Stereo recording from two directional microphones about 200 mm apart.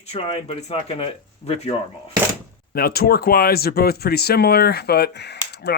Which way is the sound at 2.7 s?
50° left (ahead or behind).